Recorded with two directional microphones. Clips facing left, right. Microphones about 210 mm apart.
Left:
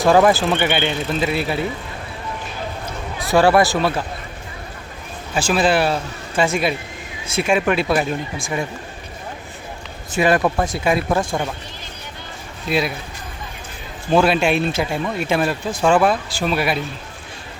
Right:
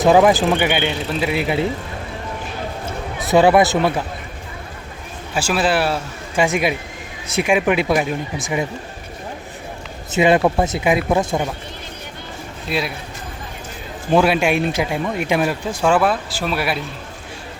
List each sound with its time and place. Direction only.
0.2 s speech: 10° right (ahead or behind)
3.2 s speech: 20° right (ahead or behind)
5.3 s speech: 5° right (ahead or behind)
10.1 s speech: 20° right (ahead or behind)
12.6 s a man's voice: centre (ahead or behind)
14.1 s speech: 15° right (ahead or behind)